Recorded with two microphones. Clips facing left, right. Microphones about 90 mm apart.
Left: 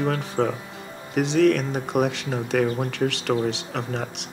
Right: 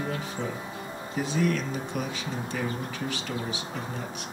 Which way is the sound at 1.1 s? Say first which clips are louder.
Left 8 dB; 85° left.